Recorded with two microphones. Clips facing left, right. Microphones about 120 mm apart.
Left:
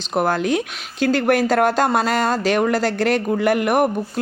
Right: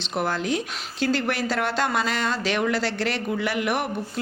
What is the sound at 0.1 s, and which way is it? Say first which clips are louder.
Speech: left 6 dB; 50° left (ahead or behind).